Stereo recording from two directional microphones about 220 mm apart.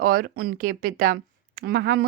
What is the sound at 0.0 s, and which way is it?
A woman's voice, 40° right (ahead or behind).